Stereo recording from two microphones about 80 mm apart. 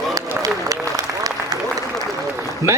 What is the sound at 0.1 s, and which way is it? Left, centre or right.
Applause, right.